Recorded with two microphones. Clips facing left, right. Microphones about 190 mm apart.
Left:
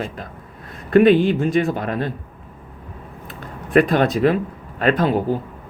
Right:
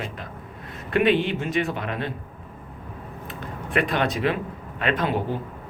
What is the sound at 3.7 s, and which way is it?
Speech, 40° left (ahead or behind).